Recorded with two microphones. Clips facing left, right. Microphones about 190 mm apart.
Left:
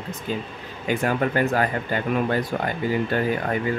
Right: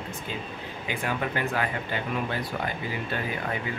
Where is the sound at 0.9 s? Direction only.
45° left (ahead or behind).